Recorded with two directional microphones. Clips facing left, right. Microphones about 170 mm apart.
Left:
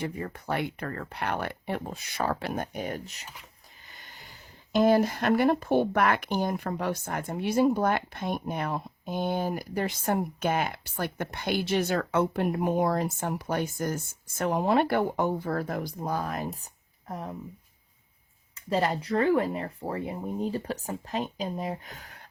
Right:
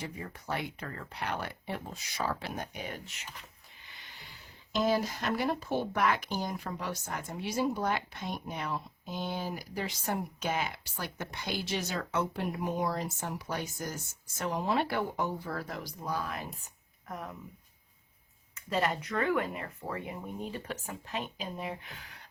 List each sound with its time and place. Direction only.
0.0 s speech: 60° left (ahead or behind); by 17.3 s 30° left (ahead or behind)
18.5 s speech: 35° left (ahead or behind)